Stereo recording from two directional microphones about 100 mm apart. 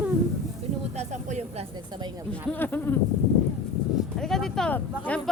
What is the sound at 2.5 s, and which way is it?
Speech, 20° left (ahead or behind).